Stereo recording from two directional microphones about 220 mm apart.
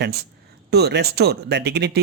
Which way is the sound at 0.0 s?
45° right (ahead or behind).